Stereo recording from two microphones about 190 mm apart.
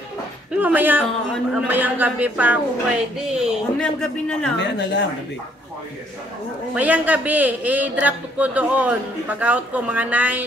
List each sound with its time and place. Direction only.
0.6 s a man's voice: 10° right (ahead or behind)
4.6 s a woman's voice: 65° left (ahead or behind)
6.7 s a man's voice: 10° right (ahead or behind)